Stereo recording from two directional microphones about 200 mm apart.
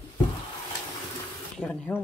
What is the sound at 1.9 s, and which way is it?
Speech, 10° left (ahead or behind).